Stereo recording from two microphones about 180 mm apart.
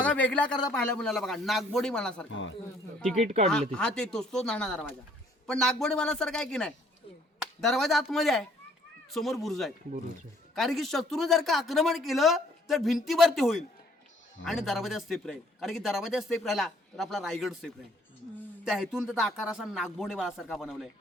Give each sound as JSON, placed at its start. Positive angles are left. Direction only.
{"t": 0.0, "sound": "a man's voice", "side_deg": 5}
{"t": 2.3, "sound": "speech", "side_deg": 90}
{"t": 3.2, "sound": "speech", "side_deg": -40}
{"t": 3.4, "sound": "a man's voice", "side_deg": 5}